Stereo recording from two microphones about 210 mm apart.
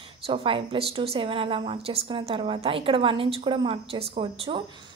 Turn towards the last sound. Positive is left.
turn(degrees=-25)  # may be behind; listen again after turning